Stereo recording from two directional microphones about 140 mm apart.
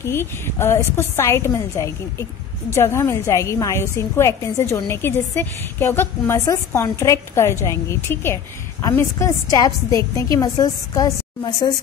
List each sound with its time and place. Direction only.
0.0 s a woman's voice: 15° left (ahead or behind)